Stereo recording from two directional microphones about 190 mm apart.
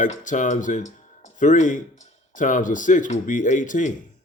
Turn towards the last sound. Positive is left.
turn(degrees=40)  # may be behind; listen again after turning